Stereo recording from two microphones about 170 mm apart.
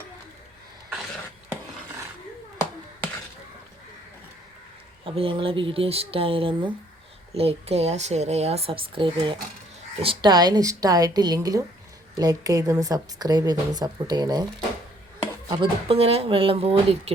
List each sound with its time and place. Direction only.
5.0 s a woman's voice: 30° right (ahead or behind)
15.4 s speech: 30° right (ahead or behind)